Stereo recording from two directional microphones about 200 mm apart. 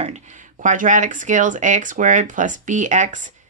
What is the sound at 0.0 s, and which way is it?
Speech, 35° right (ahead or behind).